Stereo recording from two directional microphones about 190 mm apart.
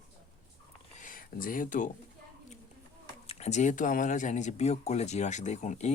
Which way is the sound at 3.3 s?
35° left (ahead or behind).